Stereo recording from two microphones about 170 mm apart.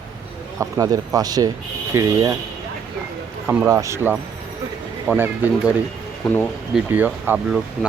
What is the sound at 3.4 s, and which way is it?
Speech, 15° right (ahead or behind).